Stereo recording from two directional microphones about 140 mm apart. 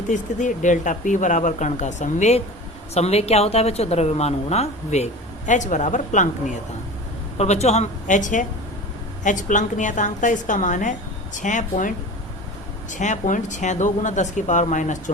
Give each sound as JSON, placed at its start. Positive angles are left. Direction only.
{"t": 0.1, "sound": "speech", "side_deg": 60}
{"t": 7.3, "sound": "speech", "side_deg": 50}